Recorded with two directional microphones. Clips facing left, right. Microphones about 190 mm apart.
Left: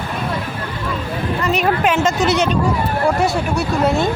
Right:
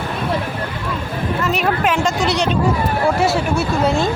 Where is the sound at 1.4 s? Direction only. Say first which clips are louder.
Left 2 dB; centre (ahead or behind).